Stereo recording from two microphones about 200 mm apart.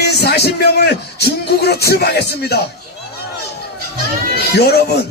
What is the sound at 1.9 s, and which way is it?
Music, 55° left (ahead or behind).